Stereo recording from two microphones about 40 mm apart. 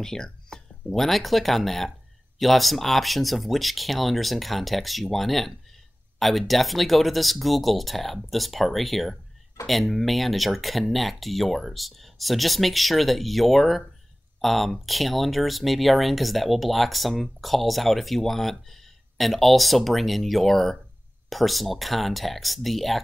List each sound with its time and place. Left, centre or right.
0.0 s speech: centre